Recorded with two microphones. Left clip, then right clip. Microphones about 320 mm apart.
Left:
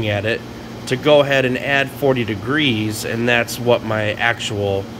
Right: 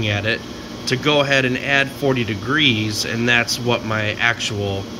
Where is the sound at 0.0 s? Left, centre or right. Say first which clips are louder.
Left 1 dB; centre.